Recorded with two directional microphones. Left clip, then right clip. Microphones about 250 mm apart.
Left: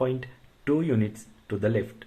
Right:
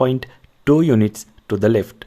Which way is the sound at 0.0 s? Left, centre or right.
Right.